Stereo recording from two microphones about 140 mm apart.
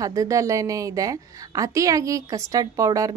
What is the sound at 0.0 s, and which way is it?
Speech, 25° right (ahead or behind).